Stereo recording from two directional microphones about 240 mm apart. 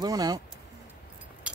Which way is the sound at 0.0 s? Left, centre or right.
Centre.